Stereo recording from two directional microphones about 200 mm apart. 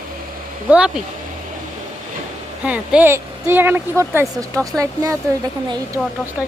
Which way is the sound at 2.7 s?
10° right (ahead or behind).